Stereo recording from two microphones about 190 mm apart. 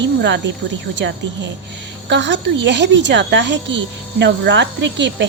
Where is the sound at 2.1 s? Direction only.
70° right (ahead or behind).